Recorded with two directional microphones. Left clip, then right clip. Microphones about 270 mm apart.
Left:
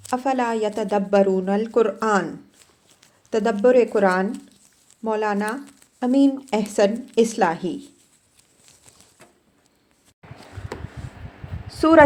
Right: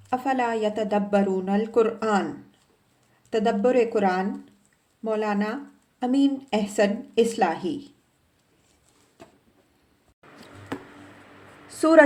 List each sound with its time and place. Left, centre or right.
0.1 s a woman's voice: centre
3.2 s speech: centre
11.8 s a woman's voice: centre